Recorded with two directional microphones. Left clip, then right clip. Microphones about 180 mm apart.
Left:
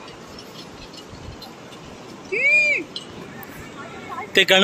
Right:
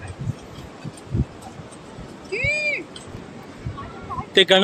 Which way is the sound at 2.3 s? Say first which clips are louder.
Left 6 dB; 40° left (ahead or behind).